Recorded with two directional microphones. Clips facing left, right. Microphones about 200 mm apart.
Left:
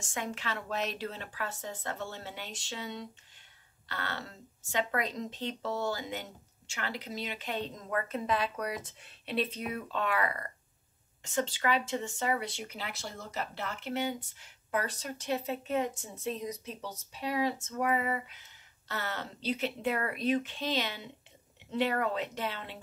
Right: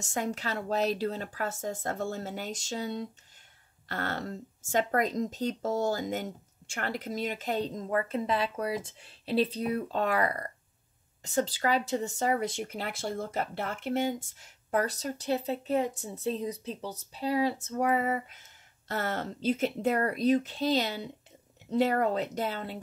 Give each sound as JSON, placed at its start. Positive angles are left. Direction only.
{"t": 0.0, "sound": "a woman's voice", "side_deg": -40}